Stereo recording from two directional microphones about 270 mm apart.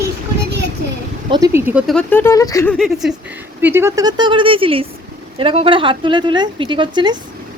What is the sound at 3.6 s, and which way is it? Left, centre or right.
A woman's voice, centre.